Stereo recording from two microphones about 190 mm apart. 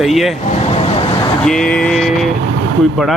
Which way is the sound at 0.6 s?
30° left (ahead or behind).